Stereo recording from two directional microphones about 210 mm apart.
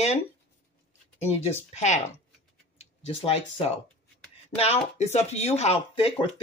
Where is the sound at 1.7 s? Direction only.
35° left (ahead or behind).